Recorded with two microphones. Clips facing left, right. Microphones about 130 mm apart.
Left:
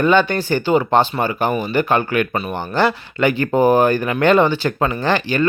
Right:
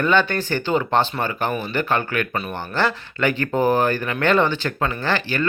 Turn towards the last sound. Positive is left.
turn(degrees=15)  # may be behind; listen again after turning